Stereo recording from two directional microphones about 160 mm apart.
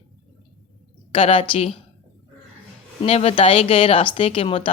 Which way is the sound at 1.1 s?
35° left (ahead or behind).